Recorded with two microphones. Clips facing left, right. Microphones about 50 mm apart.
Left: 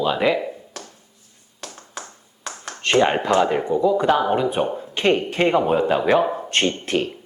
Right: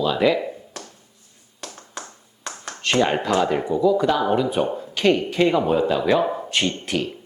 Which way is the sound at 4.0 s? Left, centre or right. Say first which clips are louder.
Left 1 dB; left.